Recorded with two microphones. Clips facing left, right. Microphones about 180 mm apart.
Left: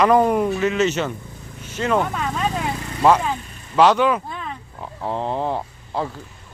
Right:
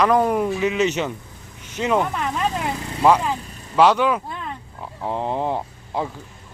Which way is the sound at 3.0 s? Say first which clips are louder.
Even; centre (ahead or behind).